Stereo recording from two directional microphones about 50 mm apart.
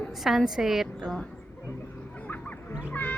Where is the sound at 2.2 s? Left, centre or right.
Left.